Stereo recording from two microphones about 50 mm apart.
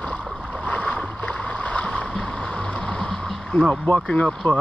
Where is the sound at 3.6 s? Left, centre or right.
Left.